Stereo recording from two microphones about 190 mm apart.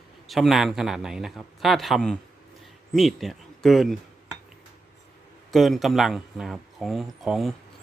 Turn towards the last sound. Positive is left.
turn(degrees=0)  # may be behind; listen again after turning